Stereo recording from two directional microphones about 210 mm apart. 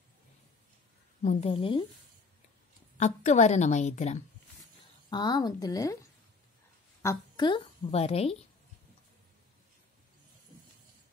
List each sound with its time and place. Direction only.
1.2 s speech: 30° left (ahead or behind)
3.0 s a woman's voice: 35° left (ahead or behind)
5.1 s speech: 20° left (ahead or behind)
7.0 s a woman's voice: 15° left (ahead or behind)